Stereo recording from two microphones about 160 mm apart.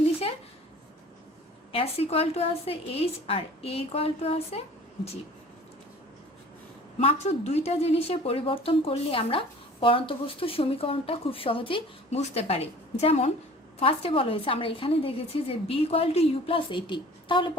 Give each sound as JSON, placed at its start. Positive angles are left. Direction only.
{"t": 1.7, "sound": "a woman's voice", "side_deg": 40}
{"t": 7.0, "sound": "a woman's voice", "side_deg": 40}